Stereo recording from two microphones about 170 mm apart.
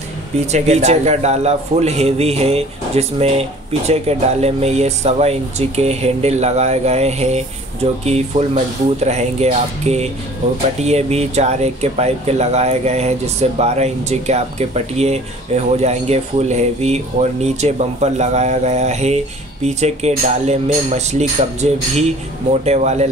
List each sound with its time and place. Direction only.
0.5 s a man's voice: 40° right (ahead or behind)